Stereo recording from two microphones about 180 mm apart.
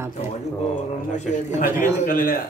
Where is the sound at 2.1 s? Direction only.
50° left (ahead or behind).